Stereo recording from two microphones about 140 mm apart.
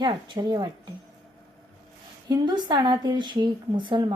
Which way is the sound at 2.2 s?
30° right (ahead or behind).